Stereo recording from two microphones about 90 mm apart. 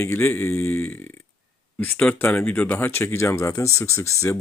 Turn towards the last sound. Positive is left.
turn(degrees=35)  # may be behind; listen again after turning